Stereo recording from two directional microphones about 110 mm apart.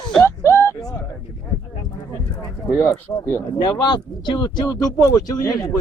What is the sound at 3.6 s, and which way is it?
Speech, 40° left (ahead or behind).